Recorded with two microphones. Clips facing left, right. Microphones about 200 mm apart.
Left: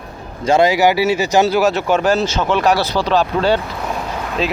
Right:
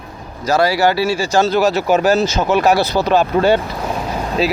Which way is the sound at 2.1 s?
40° right (ahead or behind).